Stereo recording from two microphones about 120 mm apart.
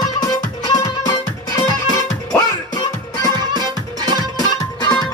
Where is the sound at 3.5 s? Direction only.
35° right (ahead or behind).